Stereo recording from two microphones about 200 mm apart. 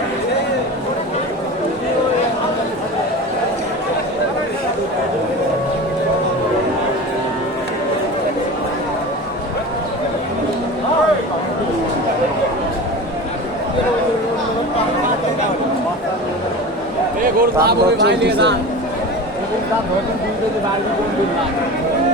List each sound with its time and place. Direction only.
17.7 s a man's voice: 55° right (ahead or behind)